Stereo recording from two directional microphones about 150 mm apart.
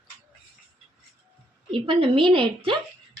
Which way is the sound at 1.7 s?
35° right (ahead or behind).